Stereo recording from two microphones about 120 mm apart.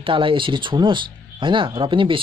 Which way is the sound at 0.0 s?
45° right (ahead or behind).